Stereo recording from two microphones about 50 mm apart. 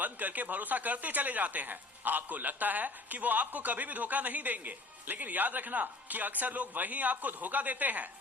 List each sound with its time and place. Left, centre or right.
0.0 s speech: right